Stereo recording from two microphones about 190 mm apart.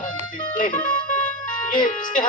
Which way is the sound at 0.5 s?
45° left (ahead or behind).